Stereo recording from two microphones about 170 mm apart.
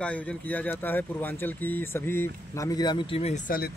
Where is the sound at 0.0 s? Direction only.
5° left (ahead or behind); by 3.3 s 35° left (ahead or behind).